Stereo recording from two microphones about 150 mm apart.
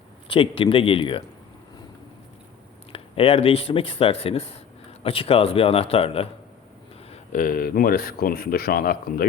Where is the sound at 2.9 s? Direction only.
40° left (ahead or behind).